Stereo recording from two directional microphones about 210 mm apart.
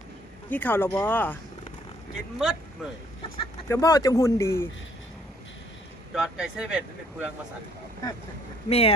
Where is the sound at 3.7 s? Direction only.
15° left (ahead or behind).